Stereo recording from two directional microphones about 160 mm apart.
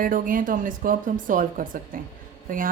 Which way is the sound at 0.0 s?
60° right (ahead or behind).